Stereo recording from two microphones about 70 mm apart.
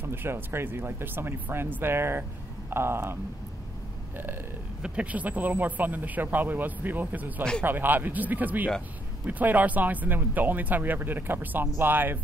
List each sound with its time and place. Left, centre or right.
0.0 s speech: right
4.8 s speech: centre